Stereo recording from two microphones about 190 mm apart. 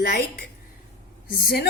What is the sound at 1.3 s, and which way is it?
Speech, 55° left (ahead or behind).